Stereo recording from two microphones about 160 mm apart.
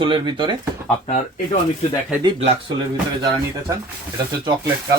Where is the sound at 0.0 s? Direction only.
30° right (ahead or behind).